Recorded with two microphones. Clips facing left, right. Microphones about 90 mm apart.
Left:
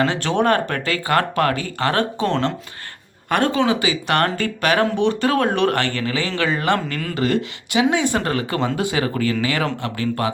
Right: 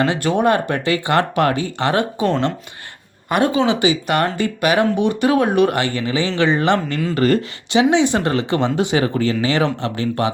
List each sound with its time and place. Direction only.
0.0 s speech: 15° right (ahead or behind)
3.7 s speech: 20° right (ahead or behind)
4.0 s speech: 5° right (ahead or behind); by 10.3 s 25° right (ahead or behind)